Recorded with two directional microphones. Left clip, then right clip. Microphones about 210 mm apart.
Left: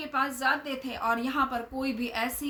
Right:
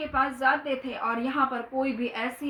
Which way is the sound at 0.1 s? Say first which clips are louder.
Right 3 dB; 20° left (ahead or behind).